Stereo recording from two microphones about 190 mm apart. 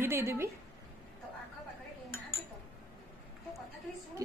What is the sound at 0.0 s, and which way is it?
Speech, 15° right (ahead or behind).